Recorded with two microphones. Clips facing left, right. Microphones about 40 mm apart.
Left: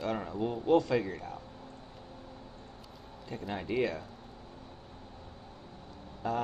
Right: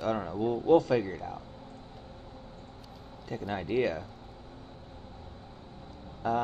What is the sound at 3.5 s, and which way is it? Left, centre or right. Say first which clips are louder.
Speech: right 2 dB; centre.